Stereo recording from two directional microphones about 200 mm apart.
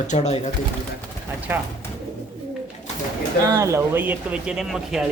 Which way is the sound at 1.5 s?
10° right (ahead or behind).